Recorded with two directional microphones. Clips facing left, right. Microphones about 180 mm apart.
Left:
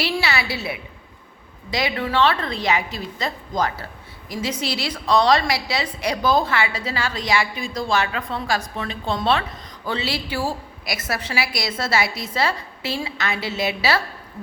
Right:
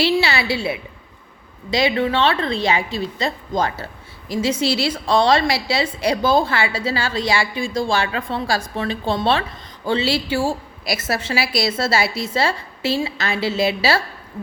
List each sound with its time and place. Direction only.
0.0 s a woman's voice: 30° right (ahead or behind)